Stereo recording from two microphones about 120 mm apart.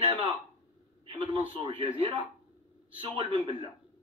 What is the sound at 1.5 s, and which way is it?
Speech, 45° right (ahead or behind).